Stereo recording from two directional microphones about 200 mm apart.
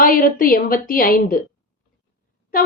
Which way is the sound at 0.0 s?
45° left (ahead or behind).